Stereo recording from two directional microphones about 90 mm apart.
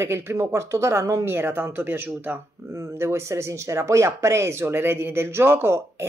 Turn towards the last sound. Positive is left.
turn(degrees=-25)  # may be behind; listen again after turning